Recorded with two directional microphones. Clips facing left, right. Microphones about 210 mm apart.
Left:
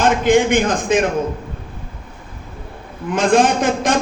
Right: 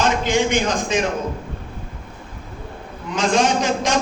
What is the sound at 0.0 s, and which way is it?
A man's voice, 55° left (ahead or behind).